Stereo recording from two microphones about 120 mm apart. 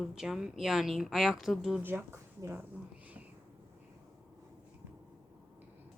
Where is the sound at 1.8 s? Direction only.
20° right (ahead or behind).